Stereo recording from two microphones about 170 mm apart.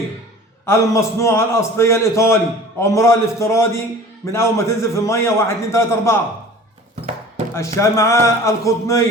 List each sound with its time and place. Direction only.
0.6 s a man's voice: 15° left (ahead or behind)
7.8 s a man's voice: 15° left (ahead or behind)